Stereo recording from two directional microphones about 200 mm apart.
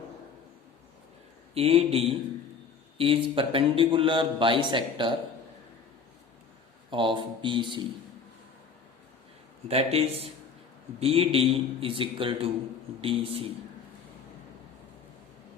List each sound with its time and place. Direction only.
1.5 s a man's voice: 30° right (ahead or behind)
6.9 s a man's voice: 25° right (ahead or behind)
9.6 s a man's voice: 30° right (ahead or behind)